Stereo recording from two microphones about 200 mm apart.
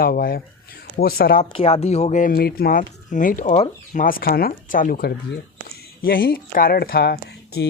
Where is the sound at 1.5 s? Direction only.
30° left (ahead or behind).